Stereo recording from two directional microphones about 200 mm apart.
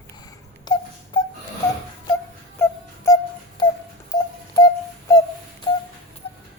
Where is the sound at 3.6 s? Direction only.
20° left (ahead or behind).